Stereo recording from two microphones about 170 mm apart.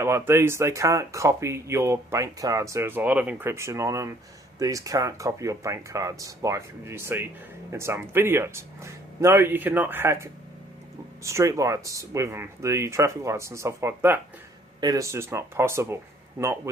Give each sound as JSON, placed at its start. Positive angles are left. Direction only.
{"t": 0.0, "sound": "speech", "side_deg": -15}